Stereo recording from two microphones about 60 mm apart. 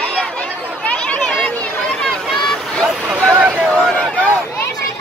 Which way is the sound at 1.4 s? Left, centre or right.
Centre.